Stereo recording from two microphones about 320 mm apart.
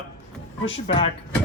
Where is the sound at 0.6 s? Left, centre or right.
Centre.